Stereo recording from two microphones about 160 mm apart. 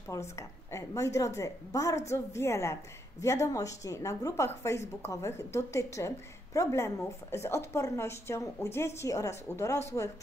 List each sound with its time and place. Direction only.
0.1 s a woman's voice: 15° left (ahead or behind)